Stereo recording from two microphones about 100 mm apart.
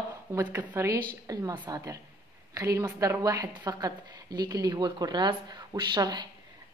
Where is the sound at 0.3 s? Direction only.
25° right (ahead or behind).